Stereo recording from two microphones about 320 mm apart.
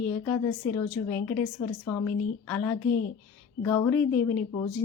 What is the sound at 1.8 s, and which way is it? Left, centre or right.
A woman's voice, centre.